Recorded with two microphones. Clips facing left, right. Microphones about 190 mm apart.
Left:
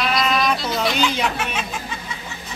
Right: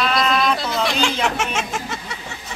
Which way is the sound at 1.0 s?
80° right.